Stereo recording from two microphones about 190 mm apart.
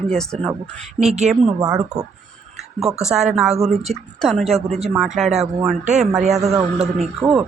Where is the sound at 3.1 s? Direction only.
5° right (ahead or behind).